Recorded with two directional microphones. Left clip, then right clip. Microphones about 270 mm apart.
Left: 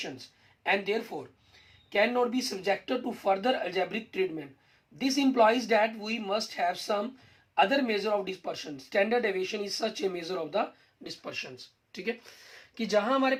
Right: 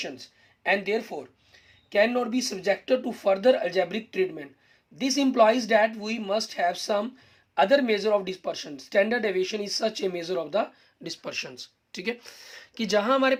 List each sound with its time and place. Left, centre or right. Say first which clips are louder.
0.7 s speech: right 3 dB; right